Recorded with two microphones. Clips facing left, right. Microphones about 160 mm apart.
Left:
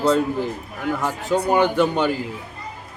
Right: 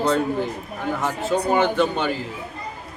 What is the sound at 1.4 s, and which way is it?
Speech, 15° left (ahead or behind).